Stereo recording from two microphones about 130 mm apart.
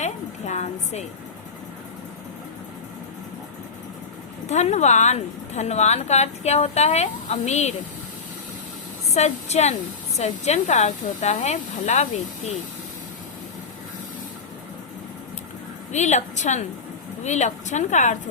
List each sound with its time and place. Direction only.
0.0 s a woman's voice: 60° left (ahead or behind)
4.4 s speech: 60° left (ahead or behind)
9.1 s speech: 60° left (ahead or behind)
15.9 s speech: 65° left (ahead or behind)